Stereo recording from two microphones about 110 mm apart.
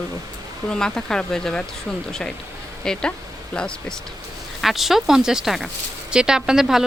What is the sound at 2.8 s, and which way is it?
Speech, 5° left (ahead or behind).